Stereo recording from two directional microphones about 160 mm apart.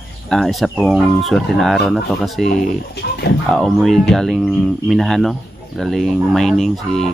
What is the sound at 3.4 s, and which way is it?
Speech, centre (ahead or behind).